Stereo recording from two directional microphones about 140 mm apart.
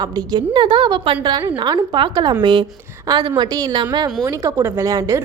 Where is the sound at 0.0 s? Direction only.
30° right (ahead or behind).